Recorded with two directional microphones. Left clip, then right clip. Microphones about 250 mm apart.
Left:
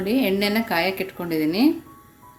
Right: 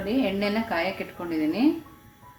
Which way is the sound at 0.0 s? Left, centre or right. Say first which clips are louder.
Left 4 dB; left.